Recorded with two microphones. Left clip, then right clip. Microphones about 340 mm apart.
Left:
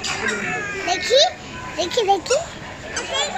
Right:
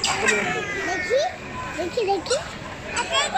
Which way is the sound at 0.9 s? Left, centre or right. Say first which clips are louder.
Left 7 dB; left.